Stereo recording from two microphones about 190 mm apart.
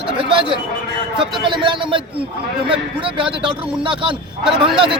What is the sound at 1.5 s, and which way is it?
Speech, 25° right (ahead or behind).